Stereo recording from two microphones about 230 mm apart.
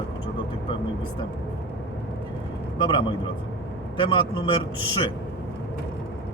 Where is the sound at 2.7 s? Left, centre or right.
Left.